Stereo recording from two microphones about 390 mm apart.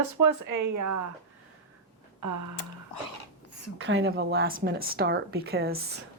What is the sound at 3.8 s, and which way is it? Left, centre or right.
A woman's voice, right.